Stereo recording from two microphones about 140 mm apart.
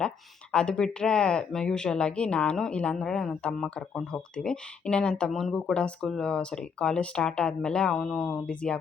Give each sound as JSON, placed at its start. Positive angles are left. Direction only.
{"t": 0.5, "sound": "speech", "side_deg": 5}